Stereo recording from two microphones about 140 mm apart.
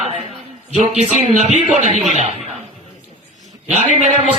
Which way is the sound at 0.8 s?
50° right (ahead or behind).